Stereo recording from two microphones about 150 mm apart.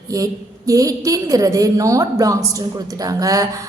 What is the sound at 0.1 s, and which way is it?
A woman's voice, 20° right (ahead or behind).